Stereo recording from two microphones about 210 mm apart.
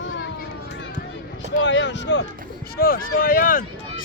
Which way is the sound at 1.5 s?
60° left (ahead or behind).